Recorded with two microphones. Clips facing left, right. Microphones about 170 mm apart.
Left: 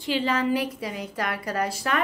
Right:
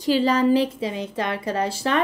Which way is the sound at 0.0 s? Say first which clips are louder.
Right 6 dB; 35° right (ahead or behind).